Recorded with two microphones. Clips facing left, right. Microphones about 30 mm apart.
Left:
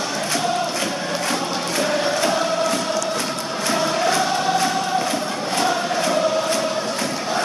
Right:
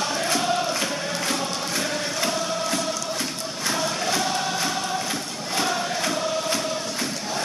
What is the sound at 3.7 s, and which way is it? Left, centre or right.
Choir, centre.